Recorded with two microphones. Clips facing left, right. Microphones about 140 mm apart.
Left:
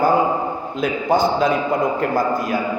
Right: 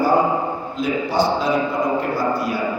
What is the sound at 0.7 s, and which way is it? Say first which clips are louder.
A man's voice: left 2 dB; 50° left (ahead or behind).